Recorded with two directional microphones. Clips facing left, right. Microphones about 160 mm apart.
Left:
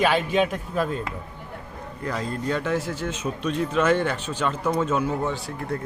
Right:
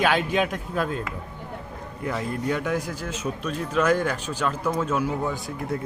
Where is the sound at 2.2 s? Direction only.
15° right (ahead or behind).